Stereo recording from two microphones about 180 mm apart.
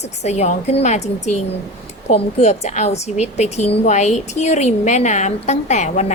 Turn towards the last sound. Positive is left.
turn(degrees=40)  # may be behind; listen again after turning